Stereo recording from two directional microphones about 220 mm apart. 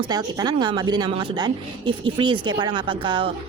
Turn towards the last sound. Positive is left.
turn(degrees=-20)  # may be behind; listen again after turning